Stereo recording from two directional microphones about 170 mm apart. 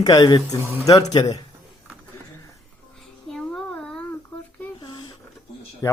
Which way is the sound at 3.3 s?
Centre (ahead or behind).